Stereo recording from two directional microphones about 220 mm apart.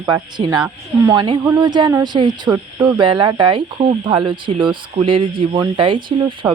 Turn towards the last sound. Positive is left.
turn(degrees=-20)  # may be behind; listen again after turning